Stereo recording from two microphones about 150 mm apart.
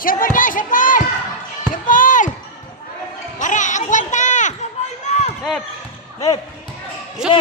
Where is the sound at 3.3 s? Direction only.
55° left (ahead or behind).